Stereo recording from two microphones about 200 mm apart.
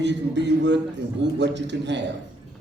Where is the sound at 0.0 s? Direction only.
60° right (ahead or behind).